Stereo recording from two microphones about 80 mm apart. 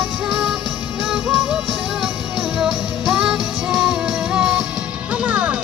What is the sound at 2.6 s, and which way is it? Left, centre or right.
Music, centre.